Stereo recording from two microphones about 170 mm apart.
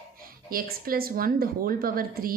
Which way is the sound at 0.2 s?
60° right (ahead or behind).